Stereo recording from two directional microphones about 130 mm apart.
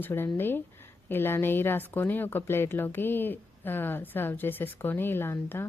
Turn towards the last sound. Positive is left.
turn(degrees=20)  # may be behind; listen again after turning